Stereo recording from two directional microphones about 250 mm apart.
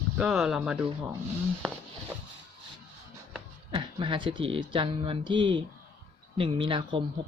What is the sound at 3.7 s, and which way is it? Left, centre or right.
Speech, centre.